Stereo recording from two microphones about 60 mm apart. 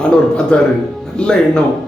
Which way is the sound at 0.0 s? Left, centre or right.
Centre.